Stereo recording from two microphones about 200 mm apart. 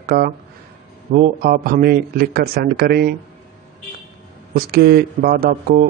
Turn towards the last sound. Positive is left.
turn(degrees=-45)  # may be behind; listen again after turning